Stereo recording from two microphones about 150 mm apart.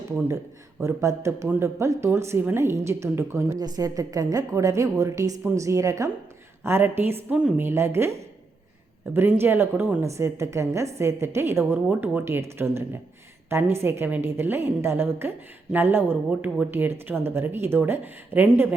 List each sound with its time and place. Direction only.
0.8 s speech: 20° right (ahead or behind)
9.1 s speech: 15° right (ahead or behind)